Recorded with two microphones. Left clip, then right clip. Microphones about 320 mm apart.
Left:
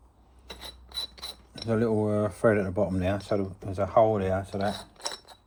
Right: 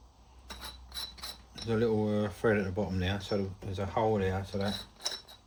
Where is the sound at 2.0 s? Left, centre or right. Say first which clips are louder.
Left 6 dB; centre.